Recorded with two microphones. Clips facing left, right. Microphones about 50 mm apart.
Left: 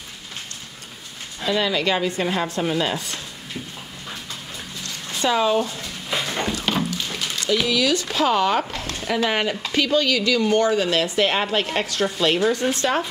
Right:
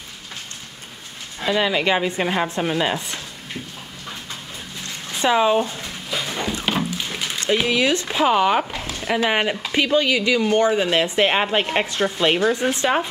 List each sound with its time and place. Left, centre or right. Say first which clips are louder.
1.4 s speech: right 2 dB; centre
4.8 s a sound: right 2 dB; right
7.3 s speech: right 2 dB; right